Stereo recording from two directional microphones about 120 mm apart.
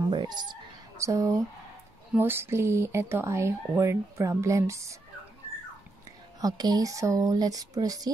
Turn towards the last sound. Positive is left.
turn(degrees=-30)  # may be behind; listen again after turning